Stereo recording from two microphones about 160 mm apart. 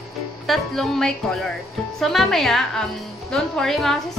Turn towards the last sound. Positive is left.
turn(degrees=0)  # may be behind; listen again after turning